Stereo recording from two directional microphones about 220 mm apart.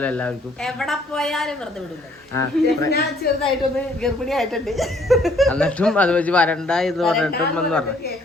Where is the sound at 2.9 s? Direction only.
45° left (ahead or behind).